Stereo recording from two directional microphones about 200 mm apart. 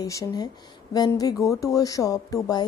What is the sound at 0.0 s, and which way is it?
Speech, 15° left (ahead or behind).